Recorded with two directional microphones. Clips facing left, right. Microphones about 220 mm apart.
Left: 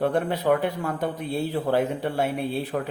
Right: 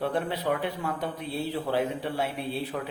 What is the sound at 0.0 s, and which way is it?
Speech, 50° left (ahead or behind).